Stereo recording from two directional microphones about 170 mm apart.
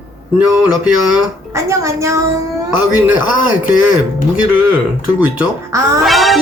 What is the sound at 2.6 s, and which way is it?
Music, 5° right (ahead or behind).